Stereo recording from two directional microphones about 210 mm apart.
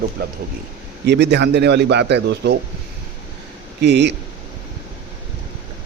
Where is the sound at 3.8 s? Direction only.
55° right (ahead or behind).